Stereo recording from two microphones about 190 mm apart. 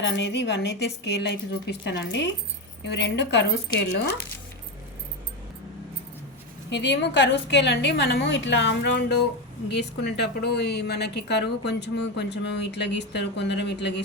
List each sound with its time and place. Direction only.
0.0 s a woman's voice: 65° left (ahead or behind)
6.7 s a woman's voice: 70° left (ahead or behind)